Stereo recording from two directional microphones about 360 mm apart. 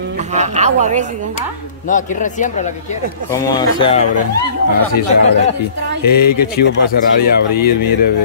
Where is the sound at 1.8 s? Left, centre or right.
Left.